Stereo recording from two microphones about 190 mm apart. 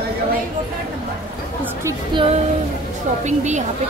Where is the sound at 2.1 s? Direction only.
30° right (ahead or behind).